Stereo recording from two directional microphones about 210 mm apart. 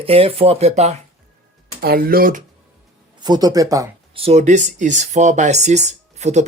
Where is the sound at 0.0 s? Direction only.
25° right (ahead or behind).